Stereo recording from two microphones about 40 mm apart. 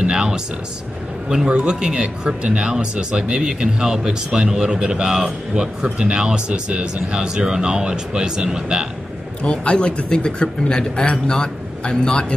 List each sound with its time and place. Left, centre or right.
0.0 s a sound: right
1.5 s speech: right
9.4 s speech: left